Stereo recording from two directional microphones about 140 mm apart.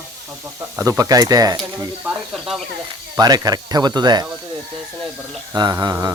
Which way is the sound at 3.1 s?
25° right (ahead or behind).